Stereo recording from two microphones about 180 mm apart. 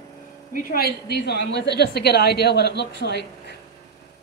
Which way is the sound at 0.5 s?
55° left (ahead or behind).